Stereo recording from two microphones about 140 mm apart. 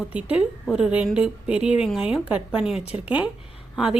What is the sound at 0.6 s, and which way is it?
A woman's voice, centre (ahead or behind).